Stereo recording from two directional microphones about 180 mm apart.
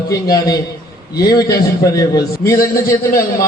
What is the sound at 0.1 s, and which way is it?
A man's voice, 20° left (ahead or behind).